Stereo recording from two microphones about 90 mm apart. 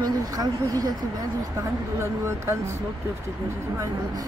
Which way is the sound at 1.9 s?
30° right (ahead or behind).